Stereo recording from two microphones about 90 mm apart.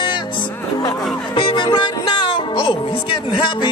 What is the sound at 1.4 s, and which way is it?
Speech, 70° left (ahead or behind).